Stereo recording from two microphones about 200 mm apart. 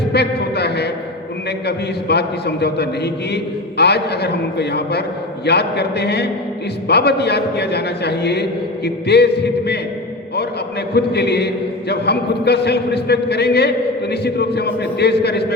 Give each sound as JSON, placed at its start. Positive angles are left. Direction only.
{"t": 0.1, "sound": "a sound", "side_deg": 55}
{"t": 1.6, "sound": "a man's voice", "side_deg": 55}
{"t": 10.9, "sound": "a man's voice", "side_deg": 55}